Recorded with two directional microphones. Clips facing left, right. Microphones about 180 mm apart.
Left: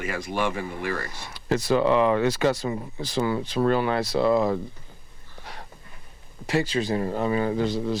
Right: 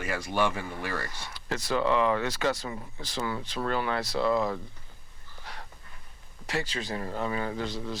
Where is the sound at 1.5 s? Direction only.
20° left (ahead or behind).